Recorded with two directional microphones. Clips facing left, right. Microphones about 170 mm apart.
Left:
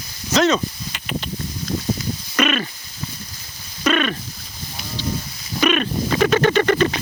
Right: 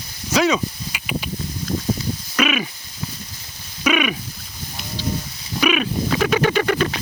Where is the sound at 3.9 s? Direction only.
10° right (ahead or behind).